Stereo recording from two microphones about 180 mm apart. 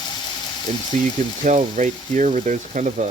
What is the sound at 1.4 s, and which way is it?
Speech, 45° right (ahead or behind).